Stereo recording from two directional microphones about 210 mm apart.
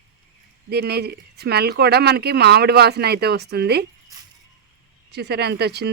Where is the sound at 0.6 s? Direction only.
50° right (ahead or behind).